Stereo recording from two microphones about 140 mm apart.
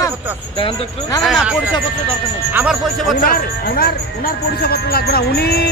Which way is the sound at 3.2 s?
90° left.